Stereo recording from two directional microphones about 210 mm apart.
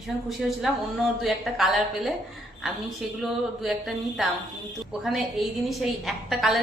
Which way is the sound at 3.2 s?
Centre (ahead or behind).